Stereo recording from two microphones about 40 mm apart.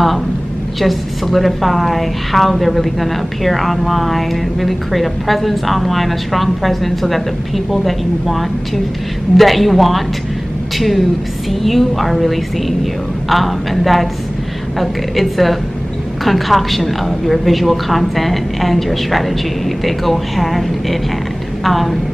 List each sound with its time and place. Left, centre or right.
0.7 s a woman's voice: centre